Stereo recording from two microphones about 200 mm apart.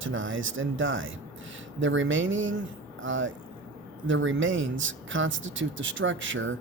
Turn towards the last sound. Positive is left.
turn(degrees=-70)  # may be behind; listen again after turning